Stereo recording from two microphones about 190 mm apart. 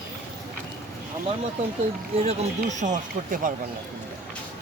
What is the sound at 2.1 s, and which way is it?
Speech, 35° right (ahead or behind).